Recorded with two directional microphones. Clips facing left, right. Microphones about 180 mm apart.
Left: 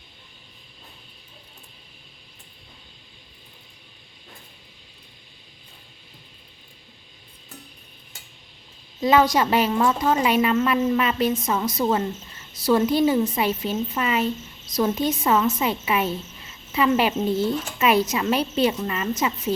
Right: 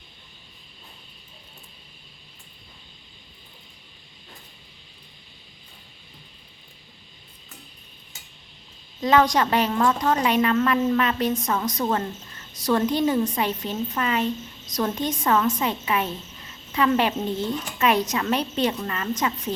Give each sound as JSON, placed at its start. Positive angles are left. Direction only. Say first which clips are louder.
{"t": 9.0, "sound": "a woman's voice", "louder": "left 1 dB", "side_deg": 5}